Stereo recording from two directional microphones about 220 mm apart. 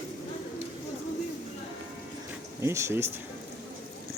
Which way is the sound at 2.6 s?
10° right (ahead or behind).